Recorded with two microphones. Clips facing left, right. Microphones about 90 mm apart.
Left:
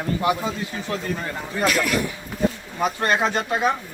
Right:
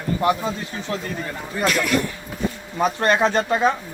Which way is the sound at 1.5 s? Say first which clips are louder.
Right 1 dB; centre (ahead or behind).